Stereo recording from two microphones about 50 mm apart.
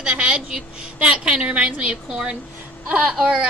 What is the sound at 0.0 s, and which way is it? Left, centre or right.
Child singing, centre.